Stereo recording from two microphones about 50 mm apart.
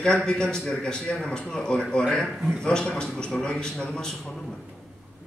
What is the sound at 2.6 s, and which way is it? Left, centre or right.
A man's voice, centre.